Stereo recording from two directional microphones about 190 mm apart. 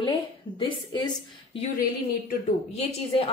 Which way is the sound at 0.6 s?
25° left (ahead or behind).